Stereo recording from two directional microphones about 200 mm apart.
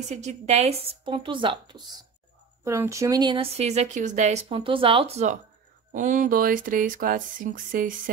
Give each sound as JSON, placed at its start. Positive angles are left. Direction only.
{"t": 0.1, "sound": "speech", "side_deg": -35}